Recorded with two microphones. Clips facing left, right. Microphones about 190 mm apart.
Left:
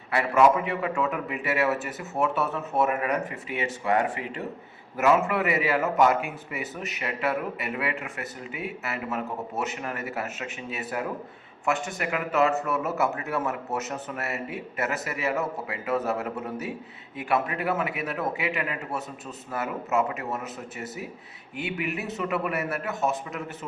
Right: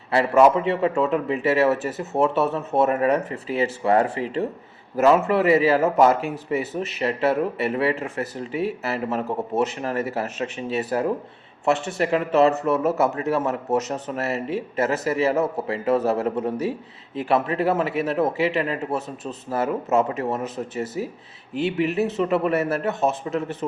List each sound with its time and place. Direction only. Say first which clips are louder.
0.1 s speech: right 4 dB; 30° right (ahead or behind)